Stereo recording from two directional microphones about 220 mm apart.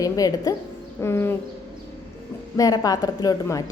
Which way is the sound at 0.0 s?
15° left (ahead or behind).